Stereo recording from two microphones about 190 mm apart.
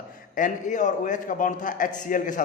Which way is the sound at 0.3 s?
40° left (ahead or behind).